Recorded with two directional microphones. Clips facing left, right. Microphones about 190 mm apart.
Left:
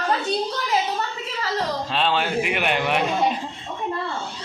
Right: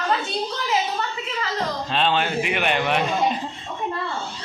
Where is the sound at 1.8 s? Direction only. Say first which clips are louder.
Right 3 dB; 5° left (ahead or behind).